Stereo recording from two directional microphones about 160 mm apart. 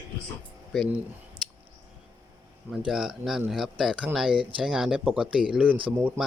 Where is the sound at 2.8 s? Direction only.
5° right (ahead or behind).